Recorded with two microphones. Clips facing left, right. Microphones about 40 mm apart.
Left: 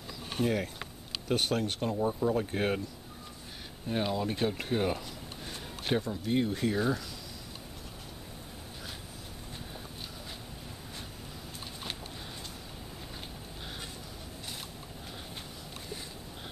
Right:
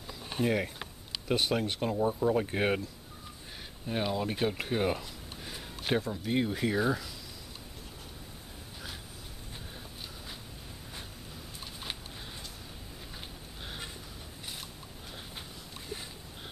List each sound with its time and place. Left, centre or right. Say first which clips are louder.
0.3 s speech: right 1 dB; centre
2.3 s speech: right 1 dB; centre
3.8 s speech: left 1 dB; centre